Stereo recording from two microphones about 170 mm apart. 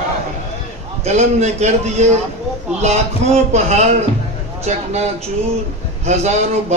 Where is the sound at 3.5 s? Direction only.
40° right (ahead or behind).